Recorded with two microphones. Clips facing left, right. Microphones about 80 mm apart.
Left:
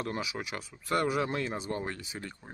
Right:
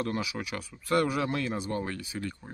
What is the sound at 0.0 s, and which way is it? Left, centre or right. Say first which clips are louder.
Speech: right 3 dB; left.